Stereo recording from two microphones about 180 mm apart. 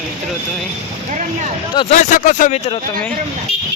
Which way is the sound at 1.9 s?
45° left (ahead or behind).